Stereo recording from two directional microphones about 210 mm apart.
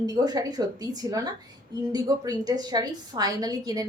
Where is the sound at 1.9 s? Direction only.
15° right (ahead or behind).